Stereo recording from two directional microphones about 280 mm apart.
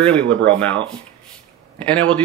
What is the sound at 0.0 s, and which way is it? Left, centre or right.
Speech, centre.